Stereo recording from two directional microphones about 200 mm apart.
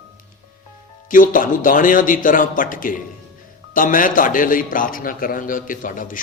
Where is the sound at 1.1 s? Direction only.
45° left (ahead or behind).